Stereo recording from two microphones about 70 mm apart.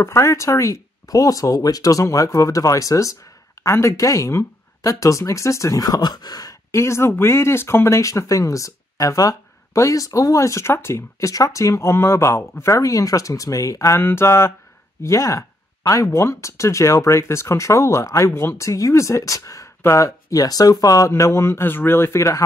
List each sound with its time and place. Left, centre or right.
0.0 s speech: left
6.7 s speech: left
14.0 s a man's voice: left
15.0 s speech: left
21.1 s a man's voice: left